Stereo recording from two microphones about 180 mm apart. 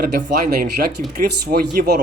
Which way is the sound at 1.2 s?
60° right (ahead or behind).